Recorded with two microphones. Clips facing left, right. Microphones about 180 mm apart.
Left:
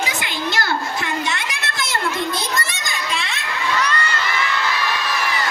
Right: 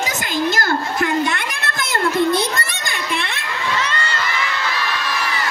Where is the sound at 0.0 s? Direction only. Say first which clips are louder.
Right 4 dB; 45° right (ahead or behind).